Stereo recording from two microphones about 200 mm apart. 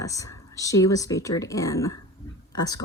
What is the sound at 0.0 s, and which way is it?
Speech, 15° left (ahead or behind).